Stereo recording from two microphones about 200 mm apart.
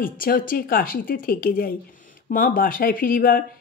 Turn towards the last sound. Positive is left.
turn(degrees=45)  # may be behind; listen again after turning